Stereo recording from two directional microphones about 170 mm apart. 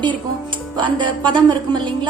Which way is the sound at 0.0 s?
30° right (ahead or behind).